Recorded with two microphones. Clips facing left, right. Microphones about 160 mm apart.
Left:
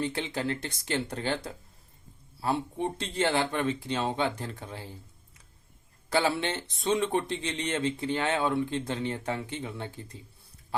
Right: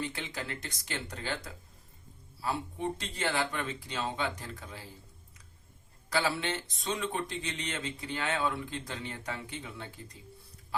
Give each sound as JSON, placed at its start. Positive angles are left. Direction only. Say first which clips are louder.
{"t": 0.0, "sound": "speech", "louder": "left 7 dB", "side_deg": 30}
{"t": 6.1, "sound": "speech", "louder": "left 4 dB", "side_deg": 25}